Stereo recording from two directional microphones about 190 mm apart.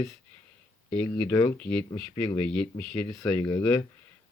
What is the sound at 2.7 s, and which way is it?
Speech, 20° left (ahead or behind).